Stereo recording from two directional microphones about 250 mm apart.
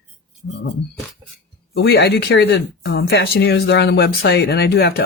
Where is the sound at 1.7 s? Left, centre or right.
Left.